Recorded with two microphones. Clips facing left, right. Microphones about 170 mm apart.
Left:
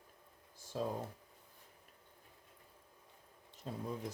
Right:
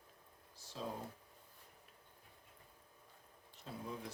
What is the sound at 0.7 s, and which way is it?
Speech, 50° left (ahead or behind).